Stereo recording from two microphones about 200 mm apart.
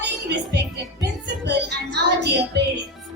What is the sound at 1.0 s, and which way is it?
Music, 60° right (ahead or behind).